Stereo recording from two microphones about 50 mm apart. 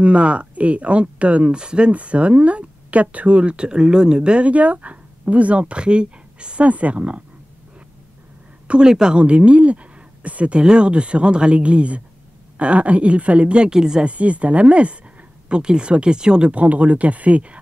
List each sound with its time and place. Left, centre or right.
0.0 s speech: right
8.6 s a woman's voice: centre
14.0 s speech: right